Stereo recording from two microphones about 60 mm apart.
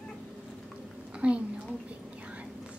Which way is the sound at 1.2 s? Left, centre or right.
Right.